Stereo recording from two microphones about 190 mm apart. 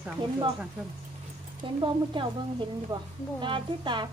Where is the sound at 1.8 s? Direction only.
25° right (ahead or behind).